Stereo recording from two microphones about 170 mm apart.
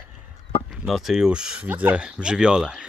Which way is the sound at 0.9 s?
Centre (ahead or behind).